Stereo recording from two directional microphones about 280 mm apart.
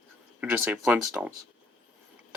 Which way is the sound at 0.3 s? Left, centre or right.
Centre.